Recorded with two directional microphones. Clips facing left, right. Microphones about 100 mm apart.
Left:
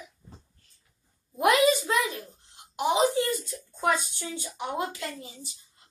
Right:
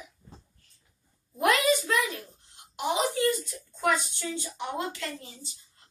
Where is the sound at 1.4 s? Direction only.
20° left (ahead or behind).